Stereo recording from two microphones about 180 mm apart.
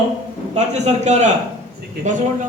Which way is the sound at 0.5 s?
40° right (ahead or behind).